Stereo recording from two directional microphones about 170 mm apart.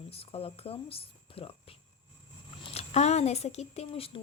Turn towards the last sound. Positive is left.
turn(degrees=35)  # may be behind; listen again after turning